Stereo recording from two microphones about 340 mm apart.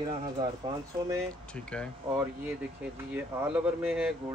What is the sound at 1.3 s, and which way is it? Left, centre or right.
Speech, centre.